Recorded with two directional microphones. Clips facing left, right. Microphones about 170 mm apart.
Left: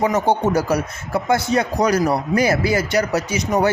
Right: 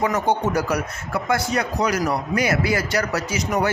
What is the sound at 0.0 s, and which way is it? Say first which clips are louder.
A man's voice: left 3 dB; 25° left (ahead or behind).